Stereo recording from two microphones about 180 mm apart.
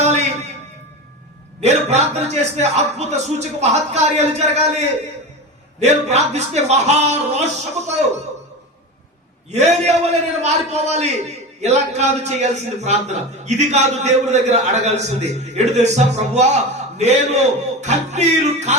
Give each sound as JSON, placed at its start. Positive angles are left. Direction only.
{"t": 0.0, "sound": "a sound", "side_deg": -40}
{"t": 1.6, "sound": "a man's voice", "side_deg": -40}
{"t": 9.5, "sound": "a man's voice", "side_deg": -40}